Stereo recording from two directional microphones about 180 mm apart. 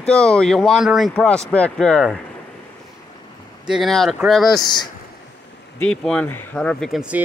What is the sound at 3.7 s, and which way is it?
Speech, centre (ahead or behind).